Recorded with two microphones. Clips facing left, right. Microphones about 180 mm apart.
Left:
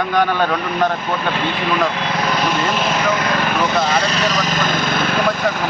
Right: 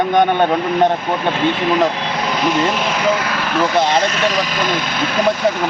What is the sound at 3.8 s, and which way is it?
Speech, 25° right (ahead or behind).